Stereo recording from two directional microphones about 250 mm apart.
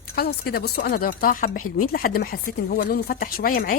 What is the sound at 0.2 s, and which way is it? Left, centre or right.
Speech, left.